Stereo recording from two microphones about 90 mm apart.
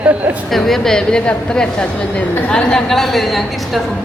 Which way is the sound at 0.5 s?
5° left (ahead or behind).